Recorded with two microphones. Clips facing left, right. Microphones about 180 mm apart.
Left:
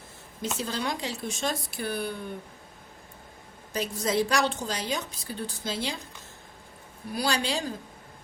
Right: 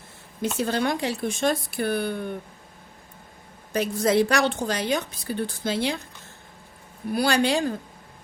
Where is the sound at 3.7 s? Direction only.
60° right (ahead or behind).